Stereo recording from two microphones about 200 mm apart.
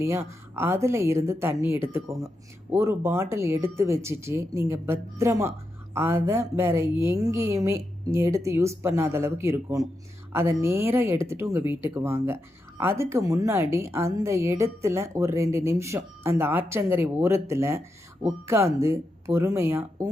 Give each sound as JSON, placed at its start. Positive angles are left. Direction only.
{"t": 0.3, "sound": "speech", "side_deg": -15}